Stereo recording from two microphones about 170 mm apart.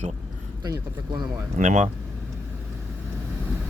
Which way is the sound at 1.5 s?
45° right (ahead or behind).